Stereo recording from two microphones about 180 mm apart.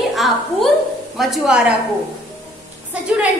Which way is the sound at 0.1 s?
Centre (ahead or behind).